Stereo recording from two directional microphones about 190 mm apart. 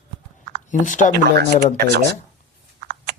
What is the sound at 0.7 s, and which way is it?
Speech, 40° left (ahead or behind).